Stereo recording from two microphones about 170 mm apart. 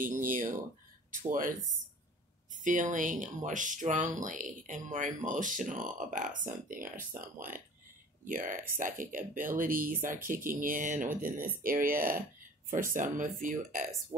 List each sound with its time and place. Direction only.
0.0 s speech: 50° right (ahead or behind)
2.5 s speech: 50° right (ahead or behind)
8.3 s speech: 55° right (ahead or behind)